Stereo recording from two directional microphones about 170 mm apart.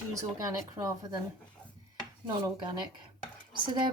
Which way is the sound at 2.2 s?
25° right (ahead or behind).